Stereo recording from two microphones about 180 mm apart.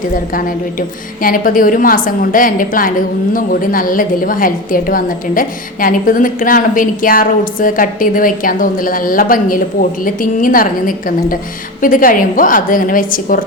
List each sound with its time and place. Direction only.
0.3 s a woman's voice: 50° left (ahead or behind)